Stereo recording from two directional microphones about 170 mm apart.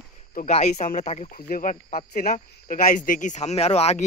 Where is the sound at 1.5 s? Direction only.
50° left (ahead or behind).